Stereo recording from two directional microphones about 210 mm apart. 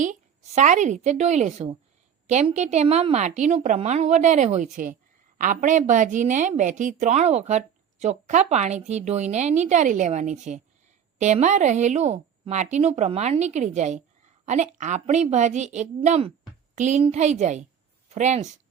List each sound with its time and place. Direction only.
0.0 s a woman's voice: 35° right (ahead or behind)